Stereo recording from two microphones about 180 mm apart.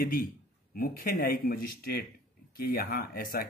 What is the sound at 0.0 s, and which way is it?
A man's voice, 55° left (ahead or behind).